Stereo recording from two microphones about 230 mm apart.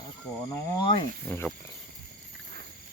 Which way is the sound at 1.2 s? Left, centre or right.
Centre.